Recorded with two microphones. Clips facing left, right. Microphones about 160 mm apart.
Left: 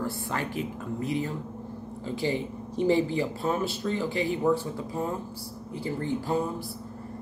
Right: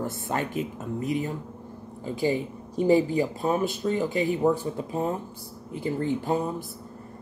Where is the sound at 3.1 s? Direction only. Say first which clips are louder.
Right 3 dB; 20° right (ahead or behind).